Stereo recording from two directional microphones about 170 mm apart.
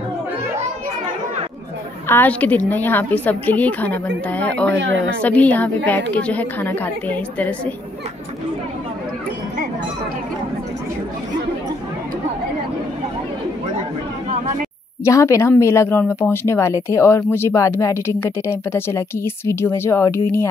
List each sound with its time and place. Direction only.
2.0 s speech: 10° left (ahead or behind)
4.7 s speech: 90° right
5.2 s speech: 10° left (ahead or behind)
14.3 s chatter: 40° right (ahead or behind)
15.0 s speech: 15° left (ahead or behind)